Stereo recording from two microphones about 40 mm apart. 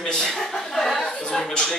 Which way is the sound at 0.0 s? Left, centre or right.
Centre.